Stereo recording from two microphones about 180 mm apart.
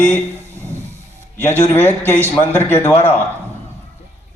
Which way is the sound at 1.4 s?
10° left (ahead or behind).